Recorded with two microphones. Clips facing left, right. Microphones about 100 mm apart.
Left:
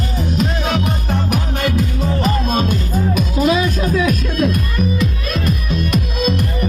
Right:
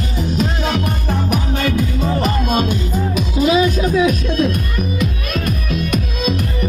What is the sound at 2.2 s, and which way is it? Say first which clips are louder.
Music: left 2 dB; 35° left (ahead or behind).